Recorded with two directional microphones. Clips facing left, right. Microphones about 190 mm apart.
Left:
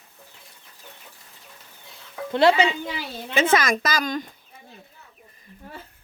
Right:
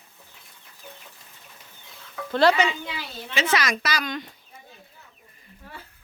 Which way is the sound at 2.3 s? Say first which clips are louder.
Left 2 dB; 25° left (ahead or behind).